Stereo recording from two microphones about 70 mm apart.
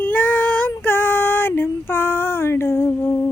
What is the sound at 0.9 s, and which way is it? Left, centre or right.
Female singing, left.